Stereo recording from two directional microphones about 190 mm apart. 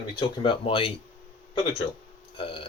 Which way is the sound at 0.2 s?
25° left (ahead or behind).